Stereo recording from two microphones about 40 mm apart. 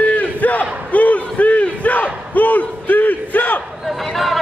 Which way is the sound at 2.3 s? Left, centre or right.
Left.